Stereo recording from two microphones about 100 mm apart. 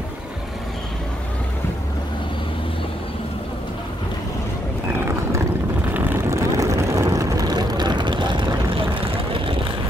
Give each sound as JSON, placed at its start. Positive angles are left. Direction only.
{"t": 5.9, "sound": "vehicle", "side_deg": -20}